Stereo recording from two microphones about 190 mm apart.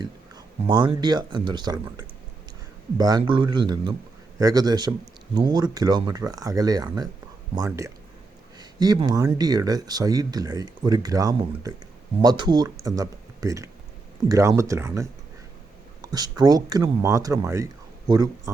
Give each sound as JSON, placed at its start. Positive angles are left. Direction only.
{"t": 0.0, "sound": "speech", "side_deg": -20}